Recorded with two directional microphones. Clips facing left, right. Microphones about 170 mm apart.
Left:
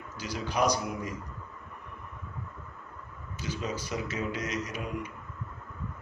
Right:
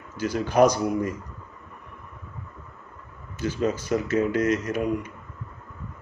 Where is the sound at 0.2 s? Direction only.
50° right (ahead or behind).